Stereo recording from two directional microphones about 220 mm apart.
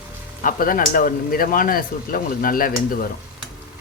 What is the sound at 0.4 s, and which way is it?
Speech, 40° left (ahead or behind).